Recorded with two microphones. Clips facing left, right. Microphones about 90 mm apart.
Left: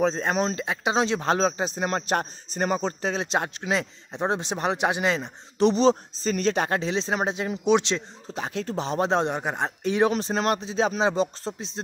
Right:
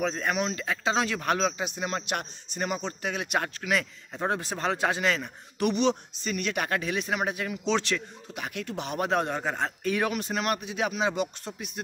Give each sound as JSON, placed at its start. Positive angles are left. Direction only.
{"t": 0.0, "sound": "speech", "side_deg": 30}
{"t": 0.6, "sound": "a man's voice", "side_deg": 25}